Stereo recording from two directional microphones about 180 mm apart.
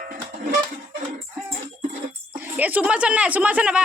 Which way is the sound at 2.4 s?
10° right (ahead or behind).